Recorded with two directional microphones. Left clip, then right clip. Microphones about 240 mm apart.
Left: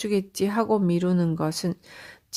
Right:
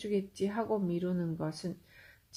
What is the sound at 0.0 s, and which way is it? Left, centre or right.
Speech, left.